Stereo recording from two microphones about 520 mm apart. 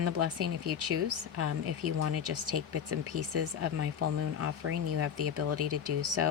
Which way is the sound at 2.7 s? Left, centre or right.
Right.